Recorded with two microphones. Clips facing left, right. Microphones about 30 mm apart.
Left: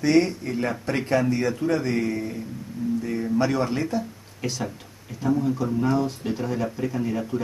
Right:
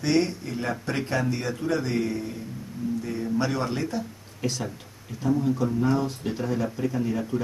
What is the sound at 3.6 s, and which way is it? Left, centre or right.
Speech, centre.